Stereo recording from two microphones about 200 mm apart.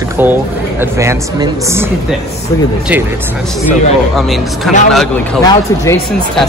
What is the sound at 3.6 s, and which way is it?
Speech, centre (ahead or behind).